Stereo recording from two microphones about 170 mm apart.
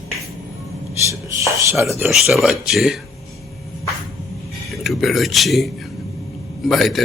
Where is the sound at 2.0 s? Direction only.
Centre (ahead or behind).